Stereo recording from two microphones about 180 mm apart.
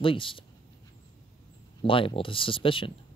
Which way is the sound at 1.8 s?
30° left (ahead or behind).